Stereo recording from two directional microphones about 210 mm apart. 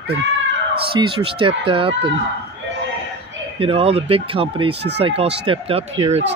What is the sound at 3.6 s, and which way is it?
Speech, 25° right (ahead or behind).